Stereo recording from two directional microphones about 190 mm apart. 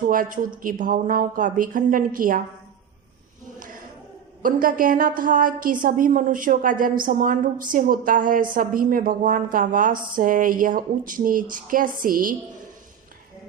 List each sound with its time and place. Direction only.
0.1 s a woman's voice: 45° right (ahead or behind)
4.4 s a woman's voice: 45° right (ahead or behind)